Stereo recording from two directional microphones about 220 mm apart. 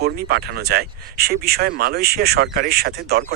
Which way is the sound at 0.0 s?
45° right (ahead or behind).